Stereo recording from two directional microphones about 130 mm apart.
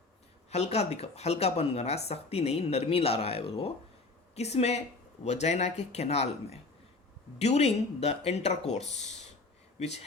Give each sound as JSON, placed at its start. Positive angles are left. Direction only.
{"t": 0.5, "sound": "speech", "side_deg": 55}